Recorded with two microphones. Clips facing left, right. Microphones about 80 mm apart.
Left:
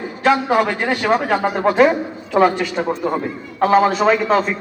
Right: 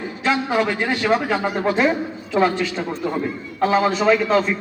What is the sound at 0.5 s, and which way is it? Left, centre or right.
A man's voice, left.